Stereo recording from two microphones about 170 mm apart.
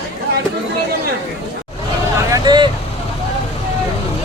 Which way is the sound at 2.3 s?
25° right (ahead or behind).